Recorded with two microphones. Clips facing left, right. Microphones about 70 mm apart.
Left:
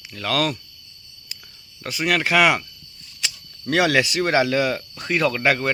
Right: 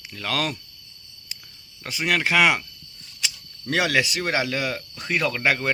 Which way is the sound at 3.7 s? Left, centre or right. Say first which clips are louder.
Left 3 dB; centre.